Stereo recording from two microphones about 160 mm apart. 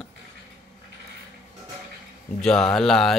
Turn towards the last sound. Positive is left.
turn(degrees=0)  # may be behind; listen again after turning